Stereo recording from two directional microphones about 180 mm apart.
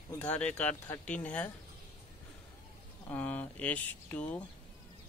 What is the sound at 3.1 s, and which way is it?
Speech, 10° left (ahead or behind).